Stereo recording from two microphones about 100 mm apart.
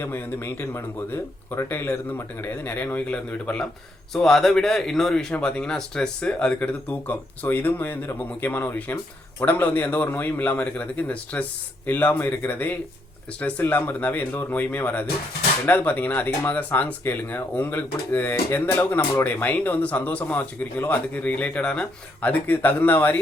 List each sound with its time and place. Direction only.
0.0 s speech: 25° left (ahead or behind)